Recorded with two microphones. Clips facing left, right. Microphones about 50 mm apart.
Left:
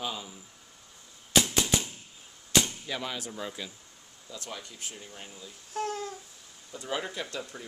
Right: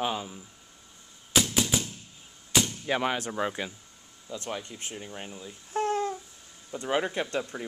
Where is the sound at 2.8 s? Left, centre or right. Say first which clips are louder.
Right 8 dB; right.